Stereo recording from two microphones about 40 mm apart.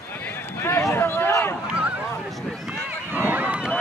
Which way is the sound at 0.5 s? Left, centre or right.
Left.